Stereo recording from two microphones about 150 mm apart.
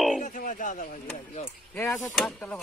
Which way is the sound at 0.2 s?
60° left (ahead or behind).